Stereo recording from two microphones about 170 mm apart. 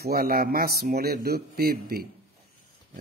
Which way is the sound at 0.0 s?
60° right (ahead or behind).